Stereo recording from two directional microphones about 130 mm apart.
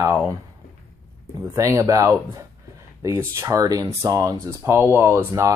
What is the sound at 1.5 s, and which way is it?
Speech, 25° right (ahead or behind).